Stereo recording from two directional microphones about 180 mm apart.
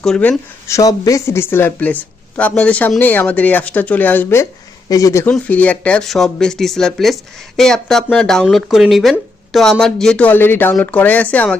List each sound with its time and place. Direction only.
0.0 s speech: 5° left (ahead or behind)
0.8 s speech: 20° left (ahead or behind)